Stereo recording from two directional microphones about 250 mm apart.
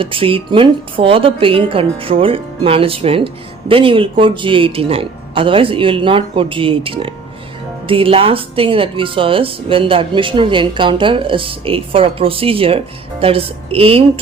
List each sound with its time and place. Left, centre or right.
0.0 s speech: right